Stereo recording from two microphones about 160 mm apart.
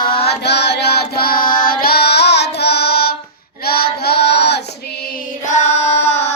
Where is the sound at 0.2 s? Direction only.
90° left.